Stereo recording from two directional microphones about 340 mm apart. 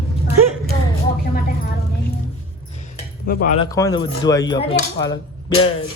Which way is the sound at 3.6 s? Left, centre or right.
Centre.